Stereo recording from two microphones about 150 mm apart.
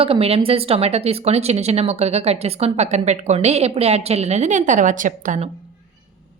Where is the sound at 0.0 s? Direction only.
40° right (ahead or behind); by 5.5 s 60° right (ahead or behind).